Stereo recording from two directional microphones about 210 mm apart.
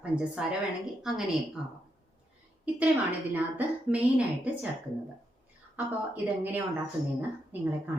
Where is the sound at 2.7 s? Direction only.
10° right (ahead or behind).